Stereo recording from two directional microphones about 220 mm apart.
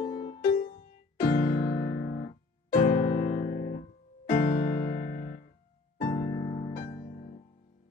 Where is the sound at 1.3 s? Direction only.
45° left (ahead or behind).